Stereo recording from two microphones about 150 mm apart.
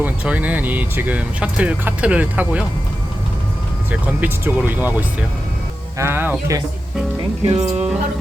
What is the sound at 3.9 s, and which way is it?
A man's voice, 10° right (ahead or behind).